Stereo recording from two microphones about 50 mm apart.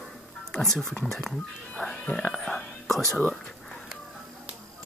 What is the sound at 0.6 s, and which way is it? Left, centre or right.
Speech, centre.